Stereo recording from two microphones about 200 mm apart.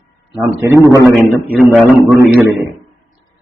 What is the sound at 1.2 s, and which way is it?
Speech, 10° right (ahead or behind).